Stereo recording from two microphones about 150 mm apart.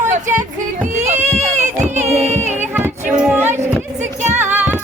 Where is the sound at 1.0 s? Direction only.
50° right (ahead or behind).